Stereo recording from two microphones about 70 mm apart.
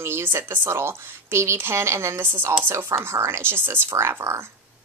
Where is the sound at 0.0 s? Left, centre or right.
Right.